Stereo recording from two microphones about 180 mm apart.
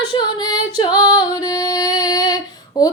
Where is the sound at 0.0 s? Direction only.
25° left (ahead or behind).